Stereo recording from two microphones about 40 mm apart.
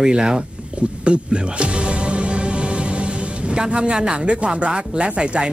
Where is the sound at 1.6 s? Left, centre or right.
Right.